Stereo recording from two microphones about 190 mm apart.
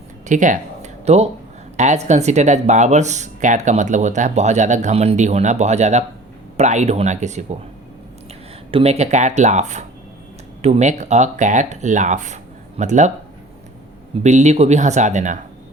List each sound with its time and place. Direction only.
0.3 s speech: 40° right (ahead or behind)
8.7 s speech: 35° right (ahead or behind)
14.2 s speech: 40° right (ahead or behind)